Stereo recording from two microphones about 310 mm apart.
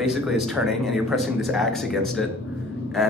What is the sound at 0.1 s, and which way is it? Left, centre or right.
Speech, centre.